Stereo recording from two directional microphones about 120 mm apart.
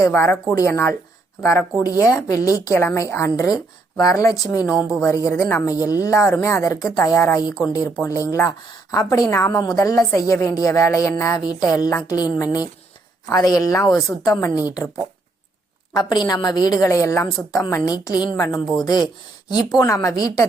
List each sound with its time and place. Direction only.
0.0 s a woman's voice: 20° left (ahead or behind)
4.8 s speech: 10° right (ahead or behind)
5.0 s a woman's voice: 25° left (ahead or behind)
16.0 s a woman's voice: 35° left (ahead or behind)
19.8 s a woman's voice: 25° left (ahead or behind)